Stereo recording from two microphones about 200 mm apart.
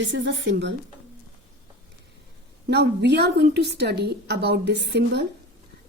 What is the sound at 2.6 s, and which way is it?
A woman's voice, 55° right (ahead or behind).